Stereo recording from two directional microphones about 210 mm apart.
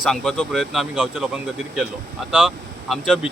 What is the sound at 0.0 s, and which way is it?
Speech, centre (ahead or behind).